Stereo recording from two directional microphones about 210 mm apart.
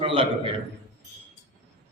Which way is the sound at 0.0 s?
25° right (ahead or behind).